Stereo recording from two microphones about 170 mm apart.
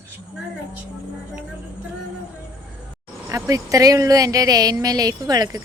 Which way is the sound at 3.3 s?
20° right (ahead or behind).